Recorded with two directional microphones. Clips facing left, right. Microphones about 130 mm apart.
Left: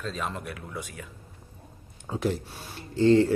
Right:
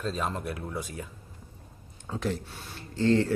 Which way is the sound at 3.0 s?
5° left (ahead or behind).